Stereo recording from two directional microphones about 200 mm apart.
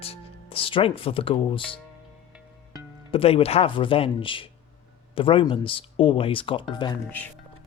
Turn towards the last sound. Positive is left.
turn(degrees=10)  # may be behind; listen again after turning